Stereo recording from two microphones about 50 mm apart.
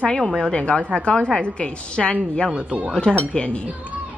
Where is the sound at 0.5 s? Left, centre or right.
Left.